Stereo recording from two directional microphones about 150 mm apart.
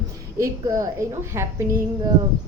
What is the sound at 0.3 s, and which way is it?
A woman's voice, 20° right (ahead or behind).